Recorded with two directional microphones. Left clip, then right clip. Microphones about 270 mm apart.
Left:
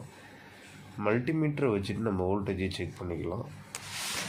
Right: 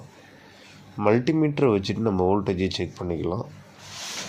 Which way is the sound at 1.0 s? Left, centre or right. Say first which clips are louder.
Right 8 dB; right.